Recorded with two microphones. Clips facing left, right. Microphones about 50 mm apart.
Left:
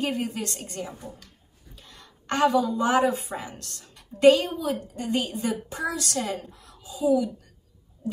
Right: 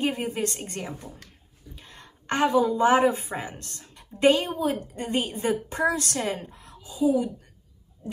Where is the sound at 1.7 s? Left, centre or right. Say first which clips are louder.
Right 2 dB; right.